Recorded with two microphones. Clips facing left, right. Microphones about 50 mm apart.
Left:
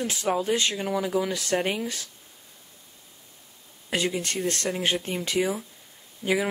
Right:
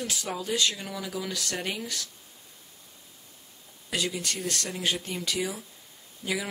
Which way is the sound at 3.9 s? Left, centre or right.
Left.